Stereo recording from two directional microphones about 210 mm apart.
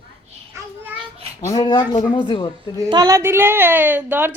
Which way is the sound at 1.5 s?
20° left (ahead or behind).